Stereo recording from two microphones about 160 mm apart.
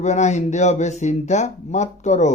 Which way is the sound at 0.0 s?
45° left (ahead or behind).